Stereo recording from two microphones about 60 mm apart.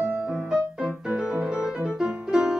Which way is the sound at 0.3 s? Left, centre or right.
Centre.